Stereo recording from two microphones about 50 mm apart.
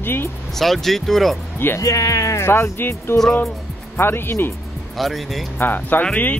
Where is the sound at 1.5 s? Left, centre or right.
Left.